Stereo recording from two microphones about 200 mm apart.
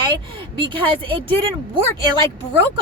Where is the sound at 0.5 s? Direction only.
25° right (ahead or behind).